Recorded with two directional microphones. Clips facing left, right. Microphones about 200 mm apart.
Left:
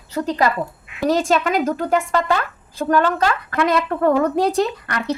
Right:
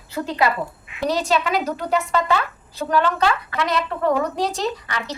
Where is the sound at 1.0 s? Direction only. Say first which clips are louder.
Left 3 dB; 50° left (ahead or behind).